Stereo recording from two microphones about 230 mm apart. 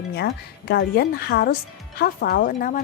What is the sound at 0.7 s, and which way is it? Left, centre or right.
A woman's voice, left.